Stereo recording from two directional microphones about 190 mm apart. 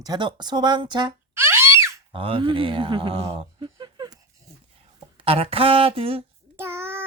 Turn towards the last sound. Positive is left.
turn(degrees=-15)  # may be behind; listen again after turning